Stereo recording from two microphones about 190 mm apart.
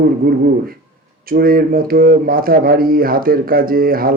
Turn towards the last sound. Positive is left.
turn(degrees=-50)  # may be behind; listen again after turning